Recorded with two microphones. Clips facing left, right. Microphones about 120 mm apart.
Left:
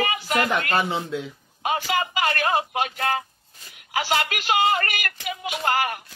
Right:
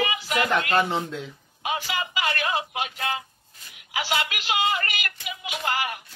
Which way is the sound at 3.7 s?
45° left (ahead or behind).